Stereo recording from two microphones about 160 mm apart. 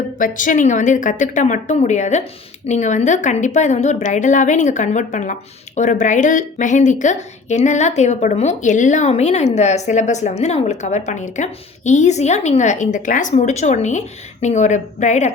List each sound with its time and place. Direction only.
0.2 s a woman's voice: 55° left (ahead or behind)